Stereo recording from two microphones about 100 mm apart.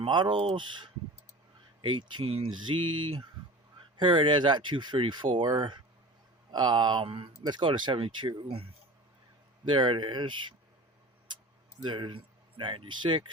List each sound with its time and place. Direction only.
0.0 s speech: 55° right (ahead or behind)
2.6 s mantra: 55° right (ahead or behind)
3.9 s speech: 55° right (ahead or behind)
7.4 s speech: 55° right (ahead or behind)
9.6 s speech: 55° right (ahead or behind)
11.8 s speech: 50° right (ahead or behind)